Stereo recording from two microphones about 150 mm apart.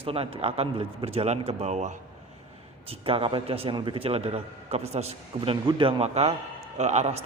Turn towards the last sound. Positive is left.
turn(degrees=-45)  # may be behind; listen again after turning